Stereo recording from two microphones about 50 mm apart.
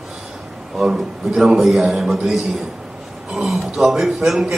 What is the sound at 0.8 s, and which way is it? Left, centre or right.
A man's voice, centre.